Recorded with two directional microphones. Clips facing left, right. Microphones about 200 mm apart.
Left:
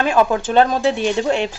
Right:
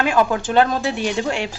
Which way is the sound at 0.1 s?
20° left (ahead or behind).